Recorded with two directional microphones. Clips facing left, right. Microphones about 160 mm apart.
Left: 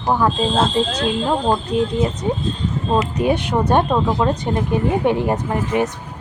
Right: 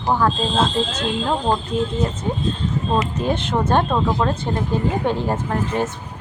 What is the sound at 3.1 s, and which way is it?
Speech, 10° left (ahead or behind).